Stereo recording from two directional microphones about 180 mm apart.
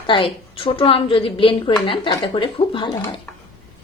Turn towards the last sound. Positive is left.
turn(degrees=25)  # may be behind; listen again after turning